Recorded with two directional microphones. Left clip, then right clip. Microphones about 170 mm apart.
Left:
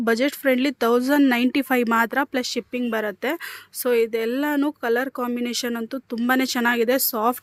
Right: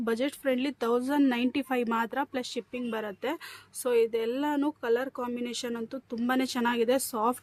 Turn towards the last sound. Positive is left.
turn(degrees=30)  # may be behind; listen again after turning